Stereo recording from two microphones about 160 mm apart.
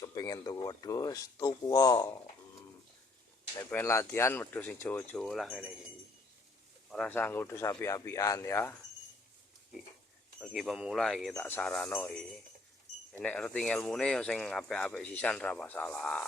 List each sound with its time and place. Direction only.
0.0 s speech: 20° left (ahead or behind)
3.6 s speech: 15° left (ahead or behind)
6.9 s speech: 5° left (ahead or behind)
10.4 s speech: centre (ahead or behind)